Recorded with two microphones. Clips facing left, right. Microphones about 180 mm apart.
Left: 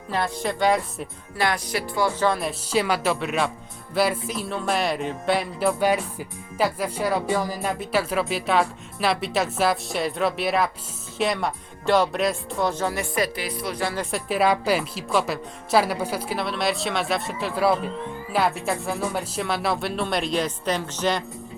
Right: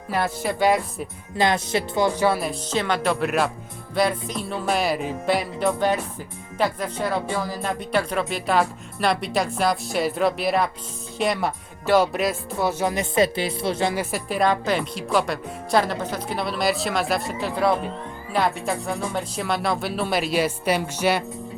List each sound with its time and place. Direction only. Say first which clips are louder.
0.1 s speech: right 1 dB; 5° right (ahead or behind)
1.4 s speech: right 4 dB; 25° right (ahead or behind); by 2.6 s 5° right (ahead or behind)
2.7 s speech: left 1 dB; 10° left (ahead or behind); by 13.9 s 25° right (ahead or behind)
13.9 s speech: even; 5° right (ahead or behind)